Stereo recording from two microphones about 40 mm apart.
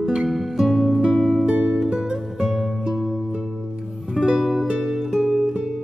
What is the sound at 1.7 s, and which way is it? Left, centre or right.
Music, centre.